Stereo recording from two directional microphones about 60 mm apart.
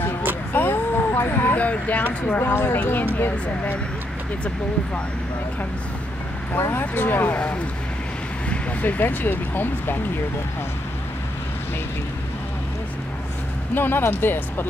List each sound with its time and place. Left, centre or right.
0.5 s vehicle: left
2.2 s speech: left
6.5 s speech: left
7.3 s speech: left
8.5 s vehicle: left
9.0 s speech: left
13.7 s speech: left